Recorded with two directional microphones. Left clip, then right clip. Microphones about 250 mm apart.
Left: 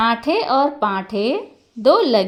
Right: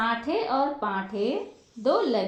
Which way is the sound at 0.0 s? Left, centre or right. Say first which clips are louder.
Left 9 dB; left.